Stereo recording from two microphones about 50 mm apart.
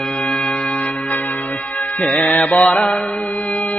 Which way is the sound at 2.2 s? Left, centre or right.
Left.